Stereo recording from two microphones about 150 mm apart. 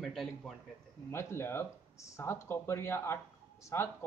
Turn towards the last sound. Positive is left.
turn(degrees=20)  # may be behind; listen again after turning